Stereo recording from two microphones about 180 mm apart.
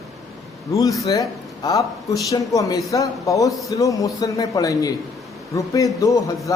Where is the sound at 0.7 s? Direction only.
20° left (ahead or behind).